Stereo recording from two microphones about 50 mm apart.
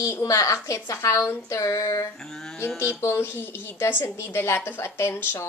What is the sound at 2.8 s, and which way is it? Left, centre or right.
A woman's voice, left.